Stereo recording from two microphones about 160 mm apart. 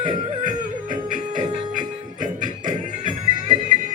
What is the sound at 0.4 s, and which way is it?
Music, 55° right (ahead or behind).